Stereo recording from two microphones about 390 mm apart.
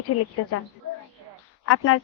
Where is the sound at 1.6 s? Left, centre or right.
Left.